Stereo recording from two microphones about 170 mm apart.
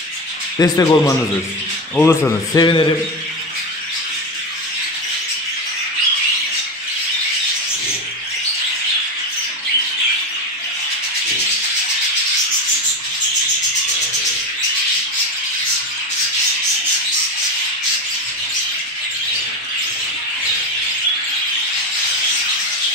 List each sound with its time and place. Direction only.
0.6 s a man's voice: 20° left (ahead or behind)